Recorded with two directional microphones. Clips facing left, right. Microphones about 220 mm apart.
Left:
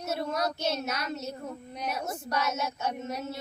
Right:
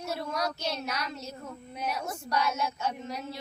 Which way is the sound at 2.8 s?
60° left (ahead or behind).